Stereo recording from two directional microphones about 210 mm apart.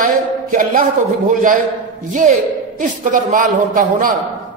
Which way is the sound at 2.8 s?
40° right (ahead or behind).